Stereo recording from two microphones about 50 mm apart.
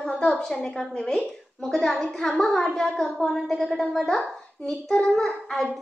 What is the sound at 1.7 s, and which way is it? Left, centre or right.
A woman's voice, centre.